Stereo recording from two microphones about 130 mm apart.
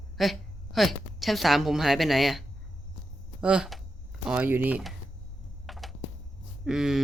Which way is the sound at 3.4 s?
5° right (ahead or behind).